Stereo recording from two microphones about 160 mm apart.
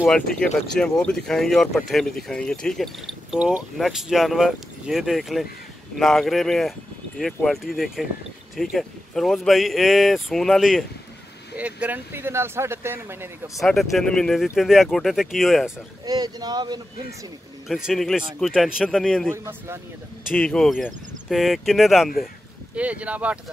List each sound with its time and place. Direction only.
0.0 s speech: 5° left (ahead or behind); by 13.3 s 15° right (ahead or behind)
13.6 s speech: centre (ahead or behind)
16.1 s speech: 25° right (ahead or behind)
17.6 s speech: centre (ahead or behind)
19.3 s speech: 15° right (ahead or behind)
20.3 s speech: 5° left (ahead or behind)